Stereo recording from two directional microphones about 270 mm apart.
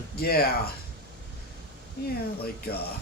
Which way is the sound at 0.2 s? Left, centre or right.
Left.